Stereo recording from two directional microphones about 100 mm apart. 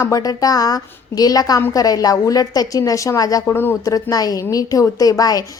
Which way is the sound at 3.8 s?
35° left (ahead or behind).